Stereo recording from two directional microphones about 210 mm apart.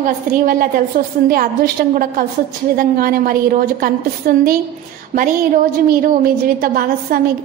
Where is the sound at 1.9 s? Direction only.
40° right (ahead or behind).